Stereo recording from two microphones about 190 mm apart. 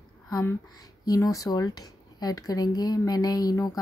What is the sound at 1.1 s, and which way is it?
Speech, 15° left (ahead or behind).